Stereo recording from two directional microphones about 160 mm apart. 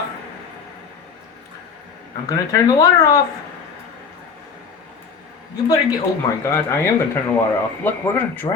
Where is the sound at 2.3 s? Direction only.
20° left (ahead or behind).